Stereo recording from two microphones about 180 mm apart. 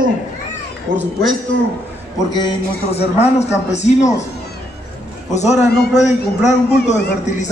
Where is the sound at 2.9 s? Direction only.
35° left (ahead or behind).